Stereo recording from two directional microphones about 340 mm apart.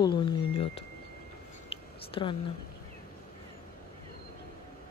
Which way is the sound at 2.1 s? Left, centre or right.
Centre.